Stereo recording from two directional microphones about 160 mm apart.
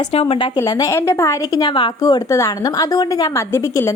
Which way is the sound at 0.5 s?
20° left (ahead or behind).